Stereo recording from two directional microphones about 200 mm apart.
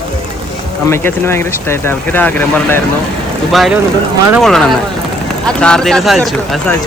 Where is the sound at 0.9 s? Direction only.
10° left (ahead or behind).